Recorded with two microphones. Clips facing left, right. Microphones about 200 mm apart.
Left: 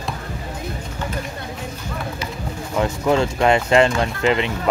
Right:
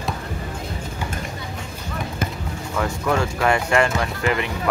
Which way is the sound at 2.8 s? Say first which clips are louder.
Left 4 dB; 25° left (ahead or behind).